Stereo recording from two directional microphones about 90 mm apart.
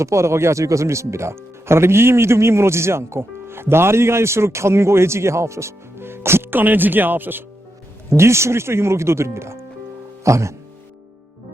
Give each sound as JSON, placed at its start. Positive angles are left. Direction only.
{"t": 0.0, "sound": "speech", "side_deg": -30}